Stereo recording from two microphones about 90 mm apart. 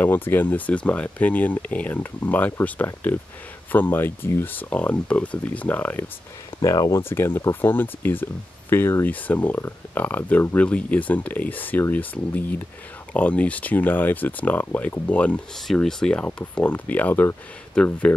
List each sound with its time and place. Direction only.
0.0 s speech: 25° left (ahead or behind)
4.6 s speech: 15° left (ahead or behind)
6.6 s speech: 40° left (ahead or behind)
7.0 s speech: 25° left (ahead or behind)
15.6 s speech: 5° left (ahead or behind)